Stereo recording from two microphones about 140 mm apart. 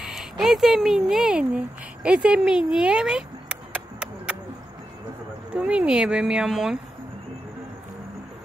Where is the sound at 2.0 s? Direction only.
5° right (ahead or behind).